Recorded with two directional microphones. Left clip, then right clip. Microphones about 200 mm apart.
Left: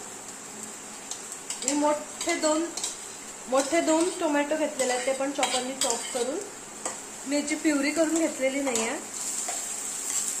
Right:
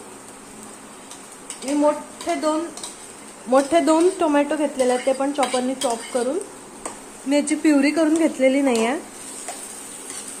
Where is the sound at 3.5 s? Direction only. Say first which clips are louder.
Right 7 dB; 50° right (ahead or behind).